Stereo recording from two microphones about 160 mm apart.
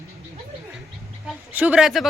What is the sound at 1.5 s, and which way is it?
Speech, 5° right (ahead or behind).